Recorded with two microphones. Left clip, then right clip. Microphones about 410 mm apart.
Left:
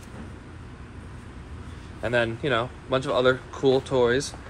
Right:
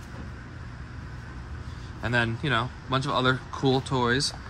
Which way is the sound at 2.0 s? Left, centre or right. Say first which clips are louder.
Left 2 dB; centre.